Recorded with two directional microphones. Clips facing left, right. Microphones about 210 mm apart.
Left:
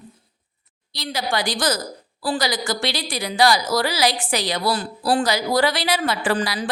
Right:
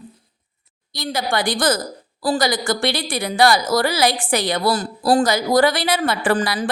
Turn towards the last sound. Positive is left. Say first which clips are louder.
# right 3 dB
turn(degrees=-50)  # may be behind; listen again after turning